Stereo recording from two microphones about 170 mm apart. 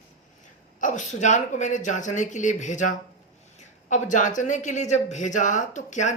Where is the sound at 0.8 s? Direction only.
50° left (ahead or behind).